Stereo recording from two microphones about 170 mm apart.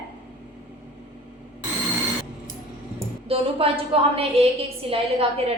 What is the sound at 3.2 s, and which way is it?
A woman's voice, 35° right (ahead or behind).